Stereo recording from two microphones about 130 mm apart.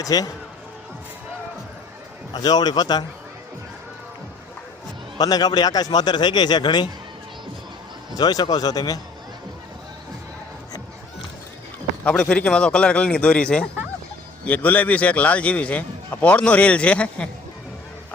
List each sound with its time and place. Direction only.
0.0 s speech: 30° left (ahead or behind)
2.3 s a man's voice: 30° left (ahead or behind)
5.1 s a man's voice: 30° left (ahead or behind)
8.1 s a man's voice: 30° left (ahead or behind)
12.0 s a man's voice: 5° left (ahead or behind)